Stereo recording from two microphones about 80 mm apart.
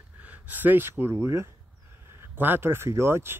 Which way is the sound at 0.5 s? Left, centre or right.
Right.